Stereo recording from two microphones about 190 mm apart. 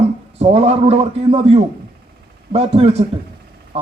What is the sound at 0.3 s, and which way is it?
A man's voice, 35° right (ahead or behind).